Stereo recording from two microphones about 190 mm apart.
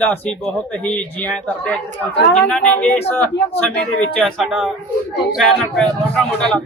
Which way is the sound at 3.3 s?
65° left (ahead or behind).